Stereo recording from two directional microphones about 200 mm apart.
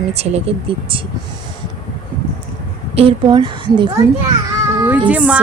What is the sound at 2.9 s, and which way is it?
Speech, 30° right (ahead or behind).